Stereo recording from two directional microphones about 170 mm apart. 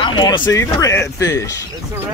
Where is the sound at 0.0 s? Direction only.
30° left (ahead or behind).